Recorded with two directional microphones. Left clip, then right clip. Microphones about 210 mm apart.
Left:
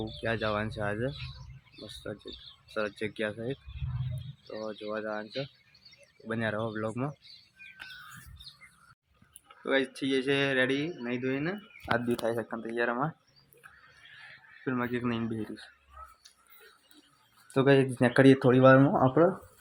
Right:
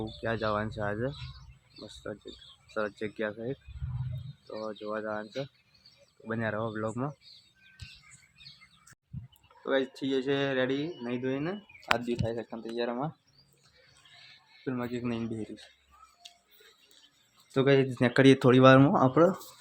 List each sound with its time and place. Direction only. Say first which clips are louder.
0.0 s speech: even; centre (ahead or behind)
4.6 s speech: even; 10° left (ahead or behind)
9.6 s speech: left 1 dB; 5° left (ahead or behind)
12.2 s speech: left 4 dB; 20° left (ahead or behind)
12.7 s speech: left 3 dB; 5° left (ahead or behind)
14.6 s speech: left 3 dB; 5° left (ahead or behind)
17.5 s speech: left 1 dB; centre (ahead or behind)
18.3 s speech: right 1 dB; 20° right (ahead or behind)